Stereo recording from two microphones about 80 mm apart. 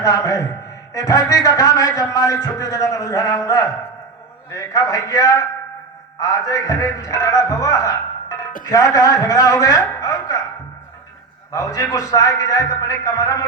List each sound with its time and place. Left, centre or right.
0.0 s a man's voice: left
9.9 s a sound: left
11.5 s a man's voice: left